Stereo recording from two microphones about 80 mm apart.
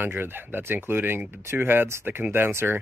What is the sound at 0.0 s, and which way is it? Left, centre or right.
Speech, right.